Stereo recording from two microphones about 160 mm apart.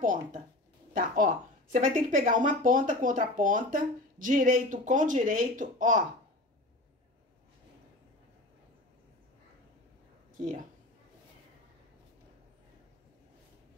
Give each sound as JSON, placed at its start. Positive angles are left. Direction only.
{"t": 0.0, "sound": "speech", "side_deg": -55}